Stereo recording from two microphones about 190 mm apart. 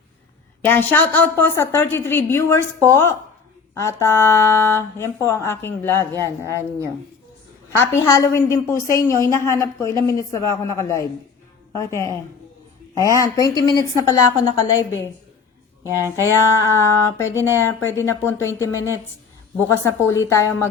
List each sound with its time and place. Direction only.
0.6 s speech: 10° left (ahead or behind)
6.5 s speech: 15° right (ahead or behind)
7.8 s a woman's voice: 15° left (ahead or behind)
15.8 s speech: 15° right (ahead or behind)
16.6 s speech: 15° left (ahead or behind)
17.3 s speech: 15° right (ahead or behind)
17.6 s speech: 10° left (ahead or behind)